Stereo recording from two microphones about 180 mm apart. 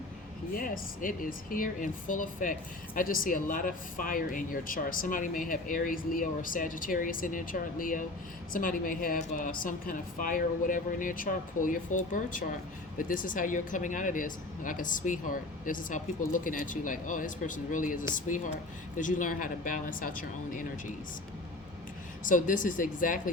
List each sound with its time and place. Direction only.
0.5 s speech: 50° left (ahead or behind)
22.2 s speech: 45° left (ahead or behind)